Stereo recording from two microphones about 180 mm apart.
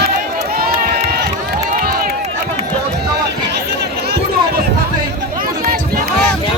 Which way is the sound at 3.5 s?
65° right (ahead or behind).